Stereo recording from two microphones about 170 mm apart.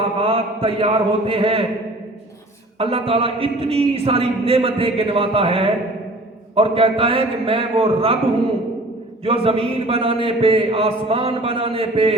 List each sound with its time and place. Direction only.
0.2 s a man's voice: 30° right (ahead or behind)
2.7 s a man's voice: 35° right (ahead or behind)
9.2 s a man's voice: 35° right (ahead or behind)